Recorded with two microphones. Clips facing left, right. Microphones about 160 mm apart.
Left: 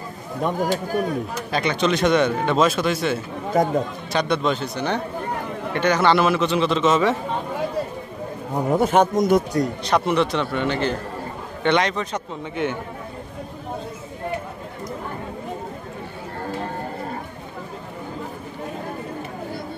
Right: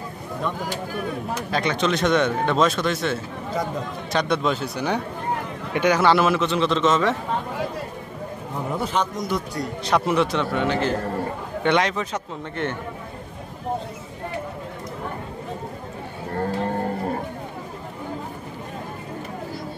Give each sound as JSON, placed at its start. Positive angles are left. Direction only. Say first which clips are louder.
{"t": 0.4, "sound": "a man's voice", "louder": "left 6 dB", "side_deg": 45}
{"t": 1.5, "sound": "speech", "louder": "left 2 dB", "side_deg": 0}
{"t": 8.6, "sound": "a man's voice", "louder": "left 7 dB", "side_deg": 50}
{"t": 9.8, "sound": "speech", "louder": "right 2 dB", "side_deg": 0}